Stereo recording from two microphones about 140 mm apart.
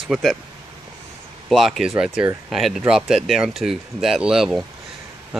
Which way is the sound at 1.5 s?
Centre (ahead or behind).